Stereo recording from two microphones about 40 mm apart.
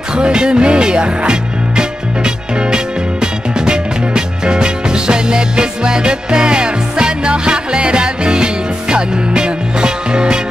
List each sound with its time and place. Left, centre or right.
0.1 s music: right